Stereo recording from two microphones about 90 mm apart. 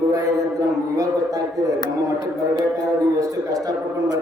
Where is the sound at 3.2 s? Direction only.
40° right (ahead or behind).